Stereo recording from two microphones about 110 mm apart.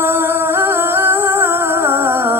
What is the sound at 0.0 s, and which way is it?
Music, 20° right (ahead or behind).